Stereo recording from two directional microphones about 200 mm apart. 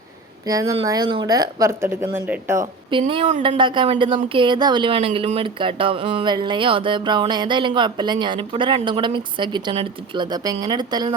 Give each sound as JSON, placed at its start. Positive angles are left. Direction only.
{"t": 0.4, "sound": "speech", "side_deg": -20}
{"t": 2.9, "sound": "speech", "side_deg": -25}